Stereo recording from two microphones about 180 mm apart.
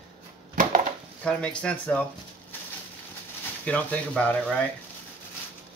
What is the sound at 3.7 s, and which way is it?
Speech, 10° left (ahead or behind).